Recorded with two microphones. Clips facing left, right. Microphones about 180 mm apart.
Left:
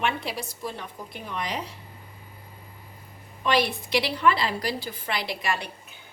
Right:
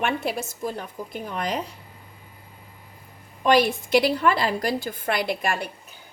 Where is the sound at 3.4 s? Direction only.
45° right (ahead or behind).